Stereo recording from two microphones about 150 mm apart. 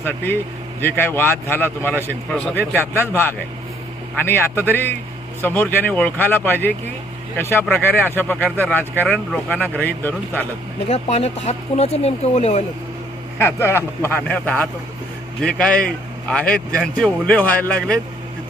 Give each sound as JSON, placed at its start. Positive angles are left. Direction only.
{"t": 0.8, "sound": "speech", "side_deg": 15}
{"t": 2.3, "sound": "a man's voice", "side_deg": 0}
{"t": 2.6, "sound": "speech", "side_deg": 15}
{"t": 10.8, "sound": "speech", "side_deg": 45}
{"t": 13.4, "sound": "a man's voice", "side_deg": 15}